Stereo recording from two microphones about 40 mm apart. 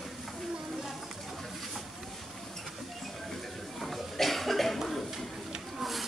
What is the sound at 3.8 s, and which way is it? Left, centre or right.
Cough, centre.